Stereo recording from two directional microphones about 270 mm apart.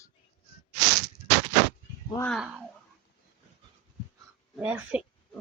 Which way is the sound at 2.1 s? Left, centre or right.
Centre.